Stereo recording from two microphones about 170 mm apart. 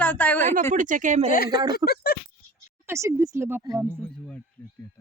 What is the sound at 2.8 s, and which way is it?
A woman's voice, 15° right (ahead or behind).